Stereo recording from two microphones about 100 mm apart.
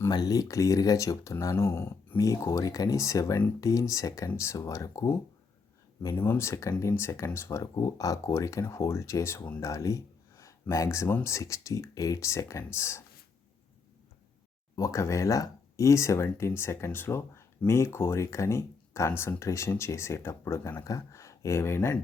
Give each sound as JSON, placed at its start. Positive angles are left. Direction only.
{"t": 0.1, "sound": "speech", "side_deg": 40}
{"t": 6.1, "sound": "speech", "side_deg": 20}
{"t": 14.8, "sound": "speech", "side_deg": 30}